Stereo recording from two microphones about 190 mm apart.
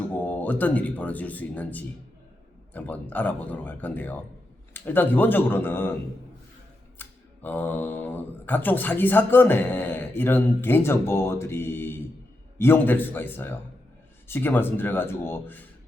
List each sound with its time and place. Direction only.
0.2 s speech: 10° left (ahead or behind)
7.0 s speech: 10° left (ahead or behind)